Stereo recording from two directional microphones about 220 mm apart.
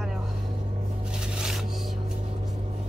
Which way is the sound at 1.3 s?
5° right (ahead or behind).